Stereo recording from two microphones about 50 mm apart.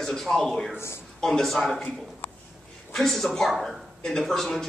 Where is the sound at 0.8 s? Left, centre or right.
Left.